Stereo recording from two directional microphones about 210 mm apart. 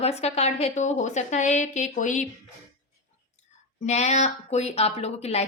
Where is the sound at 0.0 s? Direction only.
30° left (ahead or behind).